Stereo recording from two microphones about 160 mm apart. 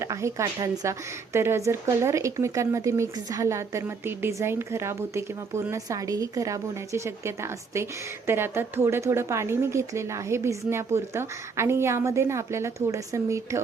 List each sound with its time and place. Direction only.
0.0 s a woman's voice: 20° right (ahead or behind)